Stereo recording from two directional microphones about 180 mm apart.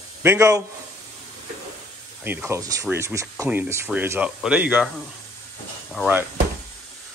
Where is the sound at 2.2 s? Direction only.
10° right (ahead or behind).